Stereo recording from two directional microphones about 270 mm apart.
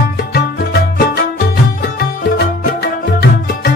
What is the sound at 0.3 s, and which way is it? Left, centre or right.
Music, left.